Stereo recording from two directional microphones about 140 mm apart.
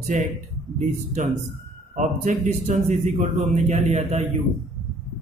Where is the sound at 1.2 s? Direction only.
60° right (ahead or behind).